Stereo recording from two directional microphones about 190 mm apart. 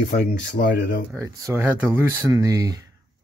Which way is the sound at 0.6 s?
50° left (ahead or behind).